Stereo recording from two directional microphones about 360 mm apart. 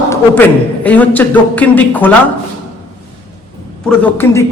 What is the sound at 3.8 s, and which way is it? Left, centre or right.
Speech, centre.